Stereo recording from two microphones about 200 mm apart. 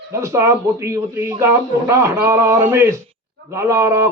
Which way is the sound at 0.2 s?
15° right (ahead or behind).